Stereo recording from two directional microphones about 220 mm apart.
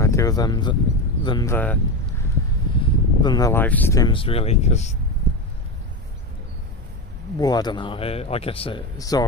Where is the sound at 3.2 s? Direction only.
20° left (ahead or behind).